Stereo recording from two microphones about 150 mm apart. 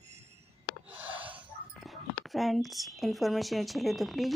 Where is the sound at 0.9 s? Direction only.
10° right (ahead or behind).